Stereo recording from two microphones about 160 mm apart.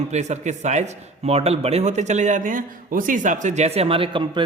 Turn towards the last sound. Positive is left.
turn(degrees=-35)  # may be behind; listen again after turning